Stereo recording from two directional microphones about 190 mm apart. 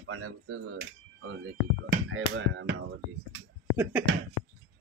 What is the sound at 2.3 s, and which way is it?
Speech, 70° right (ahead or behind).